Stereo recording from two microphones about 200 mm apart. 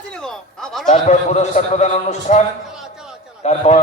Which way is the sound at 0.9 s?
35° left (ahead or behind).